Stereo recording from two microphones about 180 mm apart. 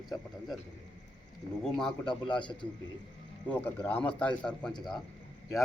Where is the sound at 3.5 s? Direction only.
10° left (ahead or behind).